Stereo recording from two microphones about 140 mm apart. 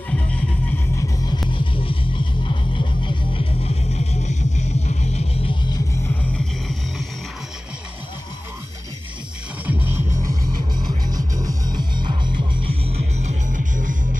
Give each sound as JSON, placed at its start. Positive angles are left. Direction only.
{"t": 0.1, "sound": "music", "side_deg": 10}
{"t": 0.9, "sound": "music", "side_deg": 30}
{"t": 9.7, "sound": "music", "side_deg": -15}
{"t": 10.8, "sound": "music", "side_deg": -30}